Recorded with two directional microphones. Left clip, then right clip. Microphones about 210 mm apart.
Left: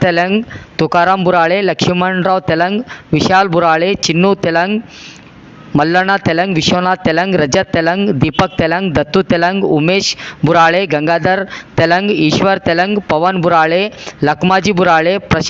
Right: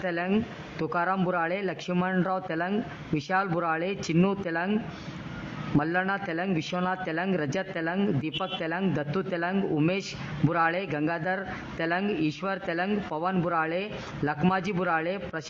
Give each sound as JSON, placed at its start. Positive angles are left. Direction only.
{"t": 0.0, "sound": "speech", "side_deg": 40}
{"t": 5.7, "sound": "speech", "side_deg": 40}